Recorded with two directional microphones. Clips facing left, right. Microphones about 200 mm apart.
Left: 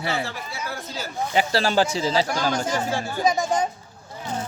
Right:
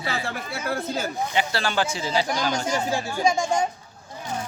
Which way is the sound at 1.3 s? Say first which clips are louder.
Left 6 dB; 40° left (ahead or behind).